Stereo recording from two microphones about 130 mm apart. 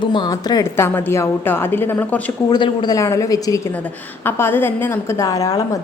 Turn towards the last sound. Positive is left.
turn(degrees=25)  # may be behind; listen again after turning